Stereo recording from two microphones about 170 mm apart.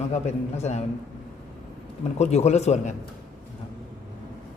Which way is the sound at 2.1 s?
40° left (ahead or behind).